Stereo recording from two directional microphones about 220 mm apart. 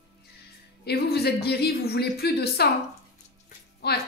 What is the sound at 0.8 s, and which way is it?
A woman's voice, 45° left (ahead or behind).